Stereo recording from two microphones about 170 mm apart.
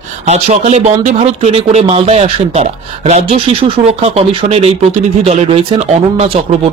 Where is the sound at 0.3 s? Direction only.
40° right (ahead or behind).